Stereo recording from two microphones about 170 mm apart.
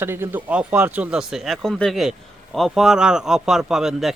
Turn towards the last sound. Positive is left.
turn(degrees=0)  # may be behind; listen again after turning